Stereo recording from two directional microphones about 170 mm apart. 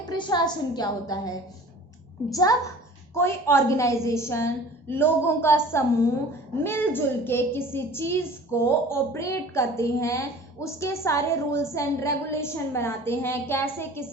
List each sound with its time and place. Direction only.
0.0 s a woman's voice: 25° left (ahead or behind)
2.3 s a woman's voice: 20° left (ahead or behind)